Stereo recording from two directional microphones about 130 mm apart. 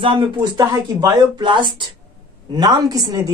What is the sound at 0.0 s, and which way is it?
Speech, 30° right (ahead or behind).